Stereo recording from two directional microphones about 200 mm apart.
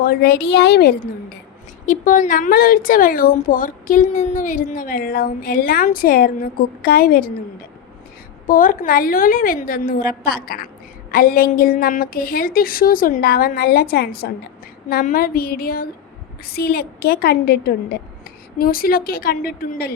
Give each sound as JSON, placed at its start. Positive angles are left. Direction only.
{"t": 0.0, "sound": "a woman's voice", "side_deg": 50}
{"t": 8.4, "sound": "a woman's voice", "side_deg": 45}